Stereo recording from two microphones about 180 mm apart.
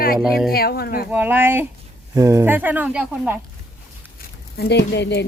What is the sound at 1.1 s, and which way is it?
Speech, 10° right (ahead or behind).